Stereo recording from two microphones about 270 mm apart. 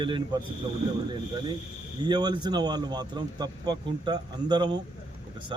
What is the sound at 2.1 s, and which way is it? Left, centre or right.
A man's voice, centre.